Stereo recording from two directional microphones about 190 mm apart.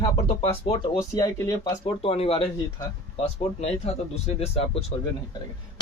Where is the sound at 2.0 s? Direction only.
30° left (ahead or behind).